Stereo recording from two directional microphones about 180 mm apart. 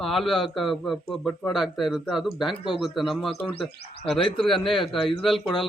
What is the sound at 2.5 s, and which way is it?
Speech, 25° left (ahead or behind).